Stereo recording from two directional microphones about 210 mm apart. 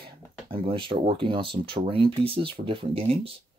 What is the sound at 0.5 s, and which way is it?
Speech, 25° right (ahead or behind).